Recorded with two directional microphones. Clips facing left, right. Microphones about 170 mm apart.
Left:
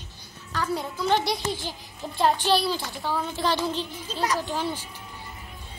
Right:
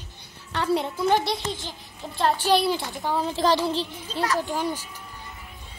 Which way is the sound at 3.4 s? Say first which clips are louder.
Right 4 dB; 35° right (ahead or behind).